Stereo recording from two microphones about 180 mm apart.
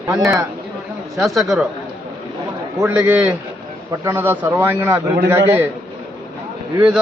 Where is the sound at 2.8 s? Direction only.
10° right (ahead or behind).